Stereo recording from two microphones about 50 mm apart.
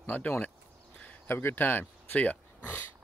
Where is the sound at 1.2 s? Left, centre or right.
Left.